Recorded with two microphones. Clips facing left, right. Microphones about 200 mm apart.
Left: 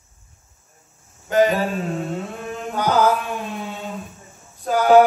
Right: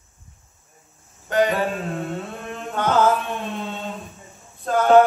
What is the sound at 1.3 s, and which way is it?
Mantra, centre (ahead or behind).